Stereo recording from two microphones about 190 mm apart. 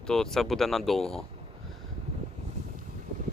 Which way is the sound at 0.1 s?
Centre (ahead or behind).